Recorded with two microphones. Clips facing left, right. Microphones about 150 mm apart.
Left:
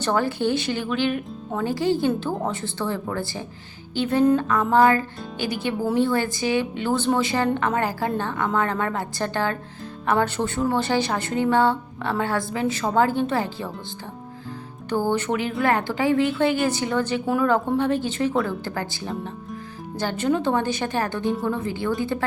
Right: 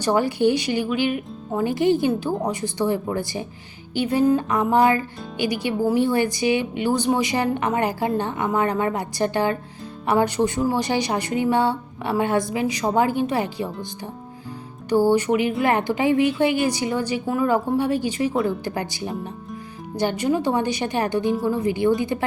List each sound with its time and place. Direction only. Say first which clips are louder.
0.0 s speech: right 3 dB; 15° right (ahead or behind)
1.5 s speech: right 3 dB; 20° right (ahead or behind)
4.4 s speech: even; 15° right (ahead or behind)
14.8 s speech: right 5 dB; 10° right (ahead or behind)
17.2 s speech: right 1 dB; centre (ahead or behind); by 21.2 s 15° right (ahead or behind)
21.2 s speech: right 2 dB; 5° right (ahead or behind)
21.6 s speech: right 5 dB; 15° right (ahead or behind)